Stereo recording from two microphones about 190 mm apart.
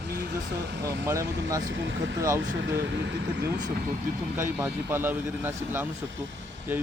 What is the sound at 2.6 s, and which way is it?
Speech, 65° right (ahead or behind).